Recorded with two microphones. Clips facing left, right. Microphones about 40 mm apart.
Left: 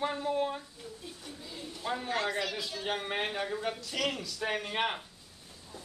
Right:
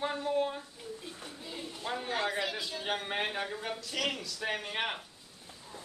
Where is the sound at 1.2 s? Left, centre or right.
Right.